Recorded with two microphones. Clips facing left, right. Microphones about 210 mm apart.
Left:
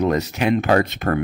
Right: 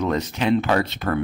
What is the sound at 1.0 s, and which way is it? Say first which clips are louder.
Speech: left 3 dB; 50° left (ahead or behind).